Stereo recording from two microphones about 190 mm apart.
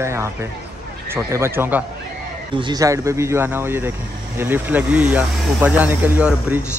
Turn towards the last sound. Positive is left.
turn(degrees=-10)  # may be behind; listen again after turning